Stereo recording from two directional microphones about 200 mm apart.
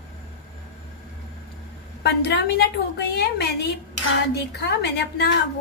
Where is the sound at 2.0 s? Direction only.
55° left (ahead or behind).